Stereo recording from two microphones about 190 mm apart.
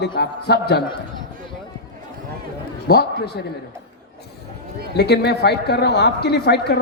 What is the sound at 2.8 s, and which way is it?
Speech, 55° left (ahead or behind).